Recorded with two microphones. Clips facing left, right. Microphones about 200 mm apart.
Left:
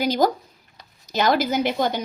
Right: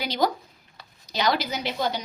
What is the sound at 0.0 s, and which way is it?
A woman's voice, 45° left (ahead or behind).